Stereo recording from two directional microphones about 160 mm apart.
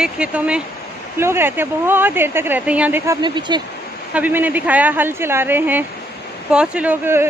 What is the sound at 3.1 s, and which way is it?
Speech, 30° right (ahead or behind).